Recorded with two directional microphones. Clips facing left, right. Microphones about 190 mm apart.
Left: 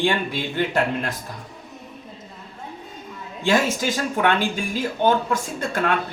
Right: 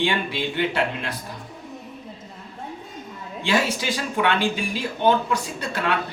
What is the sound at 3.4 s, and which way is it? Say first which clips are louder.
Speech: left 3 dB; 45° left (ahead or behind).